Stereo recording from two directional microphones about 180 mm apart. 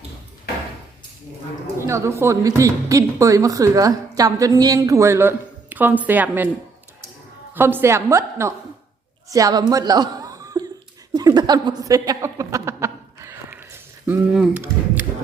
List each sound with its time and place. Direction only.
1.9 s a woman's voice: 15° right (ahead or behind)
7.5 s a woman's voice: 10° right (ahead or behind)
11.1 s a sound: 20° right (ahead or behind)
14.1 s speech: 5° right (ahead or behind)